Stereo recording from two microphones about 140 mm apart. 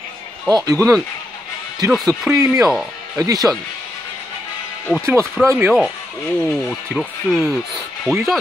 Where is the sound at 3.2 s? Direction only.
25° right (ahead or behind).